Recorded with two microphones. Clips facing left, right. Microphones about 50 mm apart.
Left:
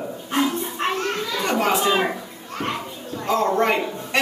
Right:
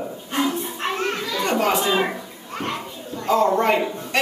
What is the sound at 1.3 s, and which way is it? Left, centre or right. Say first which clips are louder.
Children playing: even; centre.